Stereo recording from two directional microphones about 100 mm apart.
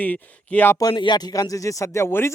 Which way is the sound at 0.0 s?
15° left (ahead or behind).